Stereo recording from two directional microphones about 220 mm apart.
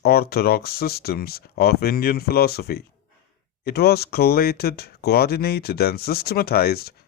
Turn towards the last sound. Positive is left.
turn(degrees=45)  # may be behind; listen again after turning